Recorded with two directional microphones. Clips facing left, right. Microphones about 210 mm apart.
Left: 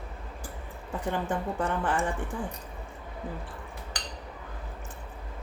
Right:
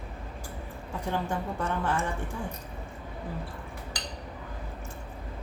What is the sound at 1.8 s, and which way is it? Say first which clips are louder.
Speech: even; 15° left (ahead or behind).